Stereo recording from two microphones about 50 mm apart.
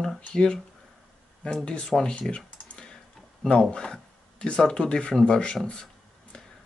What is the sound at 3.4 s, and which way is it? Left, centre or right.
Speech, centre.